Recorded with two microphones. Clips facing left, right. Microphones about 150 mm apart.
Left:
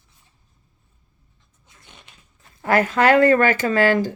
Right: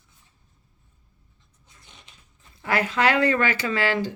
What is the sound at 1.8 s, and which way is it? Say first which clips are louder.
Speech: left 4 dB; 60° left (ahead or behind).